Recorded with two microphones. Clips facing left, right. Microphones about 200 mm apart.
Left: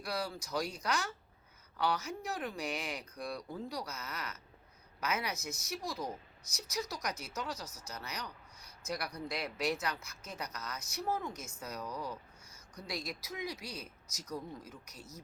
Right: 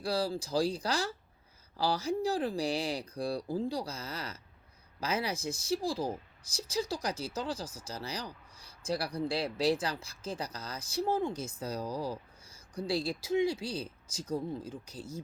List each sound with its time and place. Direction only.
0.0 s a woman's voice: 30° right (ahead or behind)